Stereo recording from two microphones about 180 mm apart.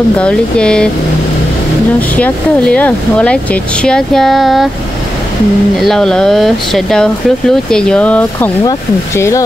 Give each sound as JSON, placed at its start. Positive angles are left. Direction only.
{"t": 0.2, "sound": "speech", "side_deg": 5}
{"t": 2.0, "sound": "speech", "side_deg": 10}
{"t": 5.8, "sound": "speech", "side_deg": 0}